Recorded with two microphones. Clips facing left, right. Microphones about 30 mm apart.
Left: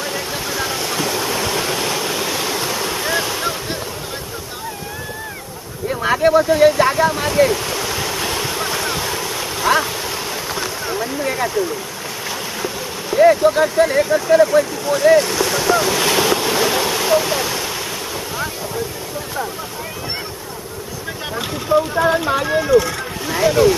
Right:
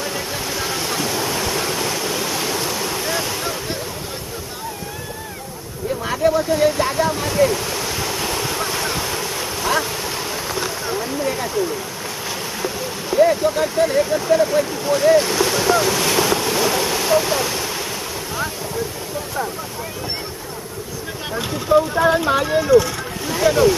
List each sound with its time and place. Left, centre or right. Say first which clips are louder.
0.0 s a sound: left 1 dB; centre
5.9 s vehicle: left 3 dB; left
6.8 s speech: left 4 dB; centre
7.5 s waves: left 2 dB; centre
10.0 s a sound: left 1 dB; centre
13.1 s speech: left 4 dB; centre
14.6 s speech: left 2 dB; centre
16.0 s a sound: left 2 dB; centre
21.3 s speech: right 1 dB; centre